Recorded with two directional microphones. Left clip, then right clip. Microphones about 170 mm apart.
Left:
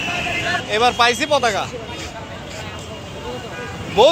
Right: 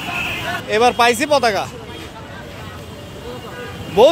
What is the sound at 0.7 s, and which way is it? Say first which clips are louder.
Speech: right 3 dB; 55° right (ahead or behind).